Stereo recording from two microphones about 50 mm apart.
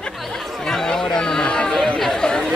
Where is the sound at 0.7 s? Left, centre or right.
Centre.